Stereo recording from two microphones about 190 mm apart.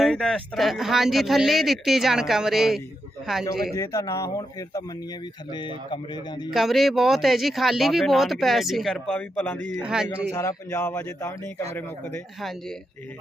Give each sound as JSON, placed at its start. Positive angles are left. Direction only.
{"t": 0.0, "sound": "a man's voice", "side_deg": 0}
{"t": 3.8, "sound": "speech", "side_deg": 15}
{"t": 6.5, "sound": "a man's voice", "side_deg": 0}
{"t": 9.7, "sound": "a man's voice", "side_deg": -5}
{"t": 10.3, "sound": "speech", "side_deg": 15}